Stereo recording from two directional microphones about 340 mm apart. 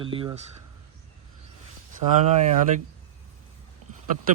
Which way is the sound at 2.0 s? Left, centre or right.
Right.